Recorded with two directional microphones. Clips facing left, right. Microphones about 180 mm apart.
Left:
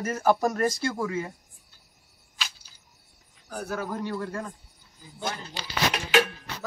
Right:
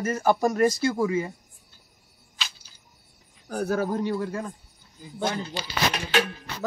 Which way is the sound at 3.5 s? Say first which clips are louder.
Right 6 dB; 40° right (ahead or behind).